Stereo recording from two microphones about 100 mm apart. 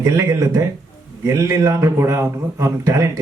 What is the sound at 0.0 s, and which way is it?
A man's voice, 35° right (ahead or behind).